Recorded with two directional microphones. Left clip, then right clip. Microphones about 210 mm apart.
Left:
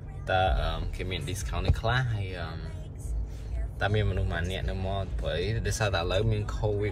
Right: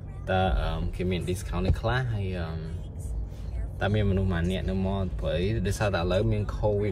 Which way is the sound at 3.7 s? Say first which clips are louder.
Right 1 dB; 15° right (ahead or behind).